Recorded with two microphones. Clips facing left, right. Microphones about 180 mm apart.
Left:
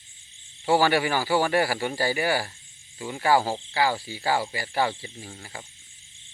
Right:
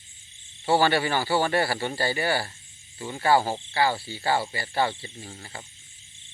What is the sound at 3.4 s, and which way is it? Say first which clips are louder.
Speech: left 1 dB; 15° right (ahead or behind).